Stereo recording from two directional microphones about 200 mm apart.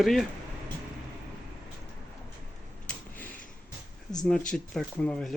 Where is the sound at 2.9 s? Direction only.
5° left (ahead or behind).